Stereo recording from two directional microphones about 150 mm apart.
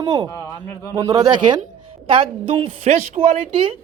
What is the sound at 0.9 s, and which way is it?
A woman's voice, 25° right (ahead or behind).